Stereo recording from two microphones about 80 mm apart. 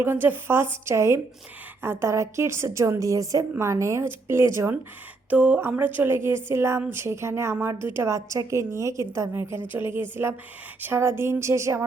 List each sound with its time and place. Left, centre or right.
0.0 s a woman's voice: right
3.5 s a woman's voice: right
5.3 s a woman's voice: centre; by 11.8 s right